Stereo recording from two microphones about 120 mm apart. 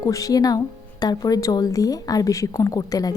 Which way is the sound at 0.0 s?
30° left (ahead or behind).